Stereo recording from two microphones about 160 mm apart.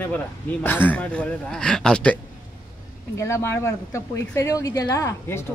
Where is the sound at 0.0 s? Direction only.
10° left (ahead or behind).